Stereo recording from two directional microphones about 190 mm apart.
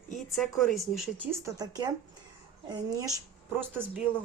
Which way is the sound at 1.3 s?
15° right (ahead or behind).